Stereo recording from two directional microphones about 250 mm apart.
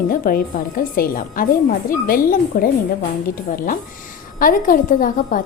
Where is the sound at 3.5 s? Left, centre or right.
Left.